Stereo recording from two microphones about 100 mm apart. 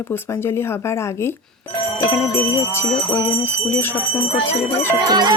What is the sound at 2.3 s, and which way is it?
Speech, 25° left (ahead or behind).